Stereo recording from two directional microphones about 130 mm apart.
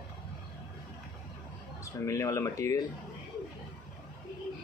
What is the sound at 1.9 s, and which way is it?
Speech, 25° left (ahead or behind).